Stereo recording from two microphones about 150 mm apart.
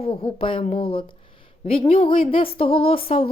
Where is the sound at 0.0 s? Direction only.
40° left (ahead or behind).